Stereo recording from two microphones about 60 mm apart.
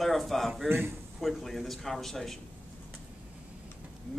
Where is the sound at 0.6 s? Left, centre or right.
Right.